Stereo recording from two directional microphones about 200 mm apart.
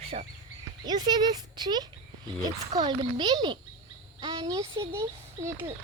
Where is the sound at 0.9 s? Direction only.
20° right (ahead or behind).